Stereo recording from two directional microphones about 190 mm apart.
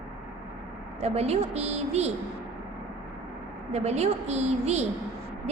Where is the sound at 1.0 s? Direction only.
35° right (ahead or behind).